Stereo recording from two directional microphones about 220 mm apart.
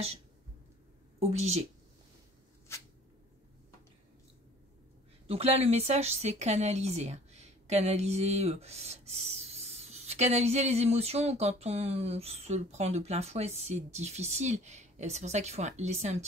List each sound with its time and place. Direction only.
1.3 s a woman's voice: 30° right (ahead or behind)
5.3 s a woman's voice: 25° right (ahead or behind)